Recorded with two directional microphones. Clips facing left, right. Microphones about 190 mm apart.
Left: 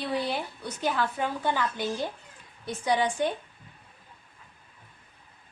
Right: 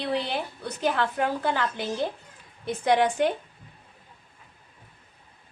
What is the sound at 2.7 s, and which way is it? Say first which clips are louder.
Speech: right 4 dB; 55° right (ahead or behind).